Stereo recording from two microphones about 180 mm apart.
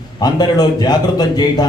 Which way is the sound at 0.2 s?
20° left (ahead or behind).